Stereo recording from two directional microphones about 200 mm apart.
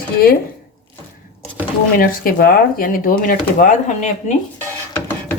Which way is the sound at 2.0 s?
45° left (ahead or behind).